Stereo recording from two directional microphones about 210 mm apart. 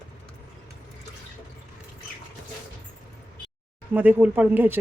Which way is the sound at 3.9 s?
5° right (ahead or behind).